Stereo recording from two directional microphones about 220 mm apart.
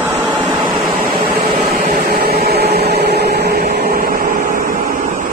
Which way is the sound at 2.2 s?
45° right (ahead or behind).